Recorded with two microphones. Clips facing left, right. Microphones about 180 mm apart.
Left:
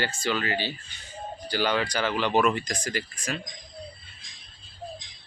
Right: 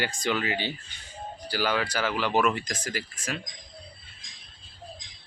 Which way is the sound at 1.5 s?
5° right (ahead or behind).